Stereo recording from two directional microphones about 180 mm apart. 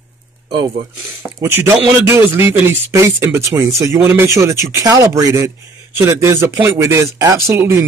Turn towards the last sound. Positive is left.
turn(degrees=-15)  # may be behind; listen again after turning